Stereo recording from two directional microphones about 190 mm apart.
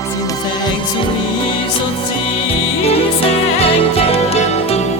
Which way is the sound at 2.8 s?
30° left (ahead or behind).